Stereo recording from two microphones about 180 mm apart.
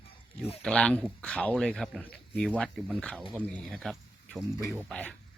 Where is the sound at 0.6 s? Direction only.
5° left (ahead or behind).